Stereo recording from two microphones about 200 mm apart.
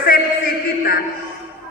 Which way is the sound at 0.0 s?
45° left (ahead or behind).